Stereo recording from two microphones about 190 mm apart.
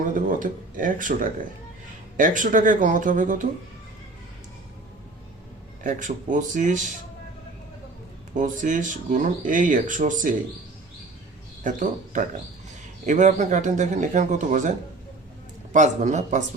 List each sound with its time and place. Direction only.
0.0 s speech: 45° right (ahead or behind)
5.8 s speech: 45° right (ahead or behind)
8.4 s speech: 40° right (ahead or behind)
11.6 s speech: 40° right (ahead or behind)
15.7 s speech: 40° right (ahead or behind)